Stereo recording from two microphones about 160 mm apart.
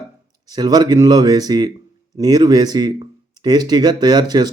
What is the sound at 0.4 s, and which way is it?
A man's voice, 25° right (ahead or behind).